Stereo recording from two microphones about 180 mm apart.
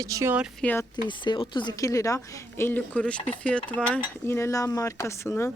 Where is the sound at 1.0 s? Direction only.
25° left (ahead or behind).